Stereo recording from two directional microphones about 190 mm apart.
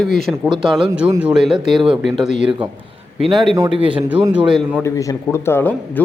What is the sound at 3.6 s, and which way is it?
Speech, 25° right (ahead or behind).